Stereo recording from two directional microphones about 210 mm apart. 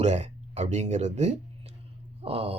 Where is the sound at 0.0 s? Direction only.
30° right (ahead or behind).